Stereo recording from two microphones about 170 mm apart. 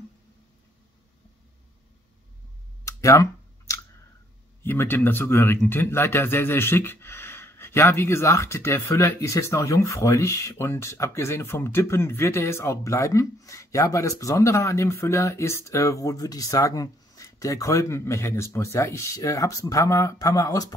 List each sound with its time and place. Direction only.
2.8 s clicking: 20° left (ahead or behind)
4.6 s speech: 10° left (ahead or behind)